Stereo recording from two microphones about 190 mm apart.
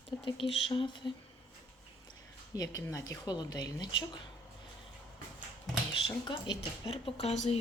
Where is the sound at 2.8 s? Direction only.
15° left (ahead or behind).